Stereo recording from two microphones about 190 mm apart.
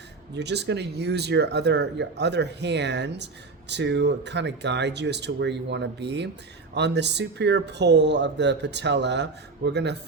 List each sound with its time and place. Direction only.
0.3 s speech: 65° right (ahead or behind)